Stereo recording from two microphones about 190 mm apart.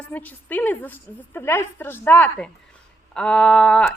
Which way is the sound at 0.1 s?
10° left (ahead or behind).